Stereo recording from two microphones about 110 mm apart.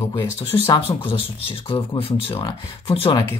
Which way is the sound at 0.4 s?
55° left (ahead or behind).